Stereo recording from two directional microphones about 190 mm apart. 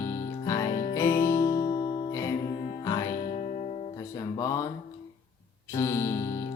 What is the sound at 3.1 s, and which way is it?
Music, 35° left (ahead or behind).